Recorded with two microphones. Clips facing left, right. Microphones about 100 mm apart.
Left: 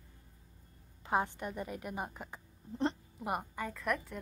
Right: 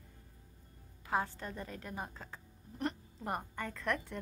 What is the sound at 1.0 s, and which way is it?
A woman's voice, 20° left (ahead or behind).